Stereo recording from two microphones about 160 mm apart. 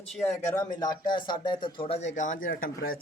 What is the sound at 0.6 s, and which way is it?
Speech, 25° left (ahead or behind).